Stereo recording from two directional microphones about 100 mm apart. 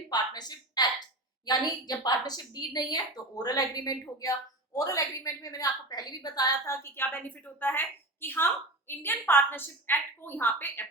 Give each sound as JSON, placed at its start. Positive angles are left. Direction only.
{"t": 0.1, "sound": "a sound", "side_deg": 45}
{"t": 1.5, "sound": "a woman's voice", "side_deg": 40}
{"t": 6.9, "sound": "a woman's voice", "side_deg": 20}